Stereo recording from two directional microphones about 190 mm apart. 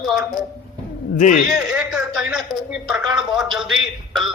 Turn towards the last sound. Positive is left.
turn(degrees=0)  # may be behind; listen again after turning